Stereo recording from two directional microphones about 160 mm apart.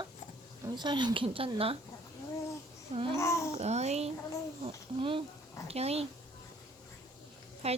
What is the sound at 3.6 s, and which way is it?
Speech, 45° right (ahead or behind).